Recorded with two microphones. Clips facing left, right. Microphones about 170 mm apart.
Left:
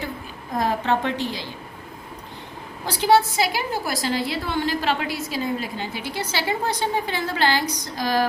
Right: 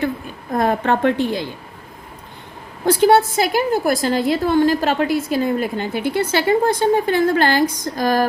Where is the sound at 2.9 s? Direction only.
50° right (ahead or behind).